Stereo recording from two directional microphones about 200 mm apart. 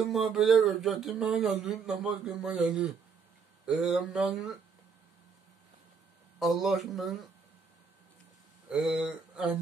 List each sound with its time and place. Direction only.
0.1 s speech: centre (ahead or behind)
6.4 s speech: centre (ahead or behind)
8.6 s a sound: 5° right (ahead or behind)